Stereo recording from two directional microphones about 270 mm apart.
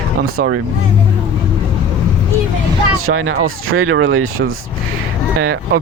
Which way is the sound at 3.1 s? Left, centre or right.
Right.